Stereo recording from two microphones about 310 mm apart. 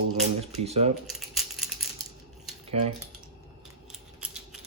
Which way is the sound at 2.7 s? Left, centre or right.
Centre.